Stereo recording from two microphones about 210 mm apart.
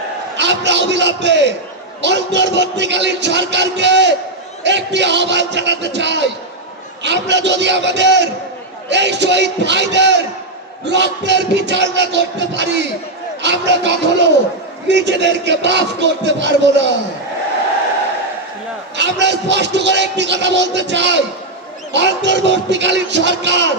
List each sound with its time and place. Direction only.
0.3 s a man's voice: 55° right (ahead or behind)
18.9 s a man's voice: 55° right (ahead or behind)